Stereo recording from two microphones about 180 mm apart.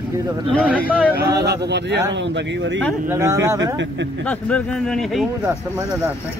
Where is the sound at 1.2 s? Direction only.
65° right (ahead or behind).